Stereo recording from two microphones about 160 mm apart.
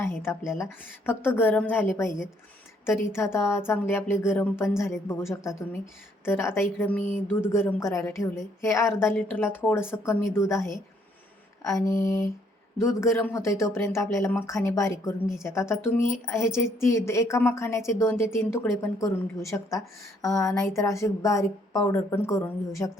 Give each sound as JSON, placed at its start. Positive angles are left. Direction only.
{"t": 0.0, "sound": "a woman's voice", "side_deg": 15}